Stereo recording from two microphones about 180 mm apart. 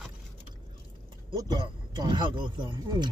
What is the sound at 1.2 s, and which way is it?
Speech, 25° right (ahead or behind).